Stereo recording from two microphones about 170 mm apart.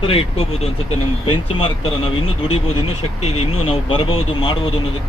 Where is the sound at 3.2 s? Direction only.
35° left (ahead or behind).